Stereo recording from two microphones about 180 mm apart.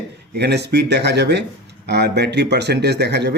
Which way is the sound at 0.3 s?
65° right (ahead or behind).